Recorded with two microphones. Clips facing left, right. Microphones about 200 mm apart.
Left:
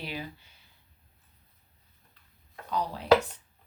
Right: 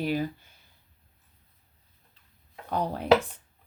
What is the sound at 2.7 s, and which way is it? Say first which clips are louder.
Dishes: right 3 dB; 55° right (ahead or behind).